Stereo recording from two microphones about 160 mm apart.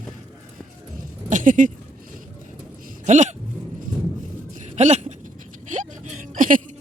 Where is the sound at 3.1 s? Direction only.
45° right (ahead or behind).